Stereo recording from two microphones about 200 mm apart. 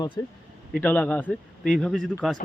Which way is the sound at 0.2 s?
20° left (ahead or behind).